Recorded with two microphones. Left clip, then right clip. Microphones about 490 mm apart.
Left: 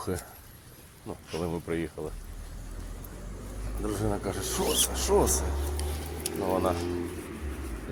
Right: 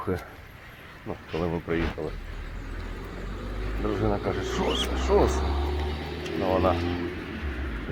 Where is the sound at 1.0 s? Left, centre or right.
Left.